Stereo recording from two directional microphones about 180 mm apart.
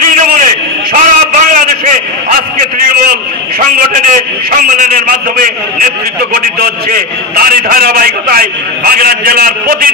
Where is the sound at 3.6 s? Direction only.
50° right (ahead or behind).